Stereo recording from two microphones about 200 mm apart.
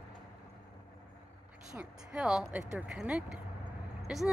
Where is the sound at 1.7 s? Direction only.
5° right (ahead or behind).